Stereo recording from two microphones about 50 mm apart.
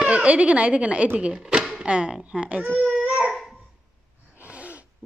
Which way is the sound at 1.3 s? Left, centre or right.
Centre.